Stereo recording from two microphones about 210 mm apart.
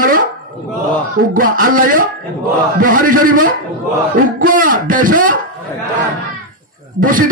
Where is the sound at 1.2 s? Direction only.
40° right (ahead or behind).